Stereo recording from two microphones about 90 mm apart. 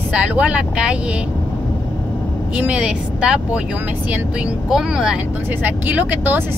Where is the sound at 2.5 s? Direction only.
15° right (ahead or behind).